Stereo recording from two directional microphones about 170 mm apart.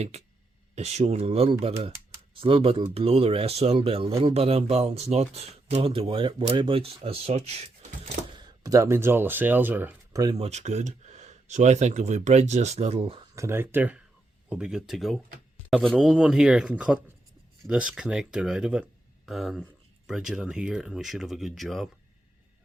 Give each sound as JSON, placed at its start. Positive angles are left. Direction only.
{"t": 0.8, "sound": "speech", "side_deg": -40}
{"t": 8.4, "sound": "speech", "side_deg": -25}
{"t": 10.3, "sound": "speech", "side_deg": -40}
{"t": 13.3, "sound": "speech", "side_deg": -15}